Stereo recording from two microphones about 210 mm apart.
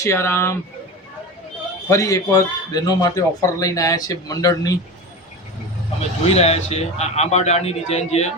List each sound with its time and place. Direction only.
0.0 s a man's voice: 15° left (ahead or behind)
1.9 s a man's voice: 15° left (ahead or behind)
6.0 s speech: 30° left (ahead or behind)